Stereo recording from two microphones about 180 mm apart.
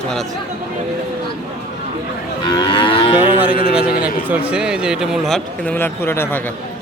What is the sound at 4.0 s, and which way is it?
A man's voice, 10° right (ahead or behind).